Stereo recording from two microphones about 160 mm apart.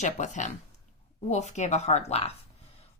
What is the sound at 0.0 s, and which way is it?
A woman's voice, 50° left (ahead or behind).